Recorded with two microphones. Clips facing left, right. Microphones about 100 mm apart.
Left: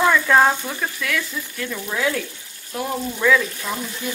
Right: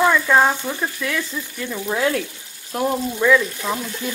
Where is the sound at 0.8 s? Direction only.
20° right (ahead or behind).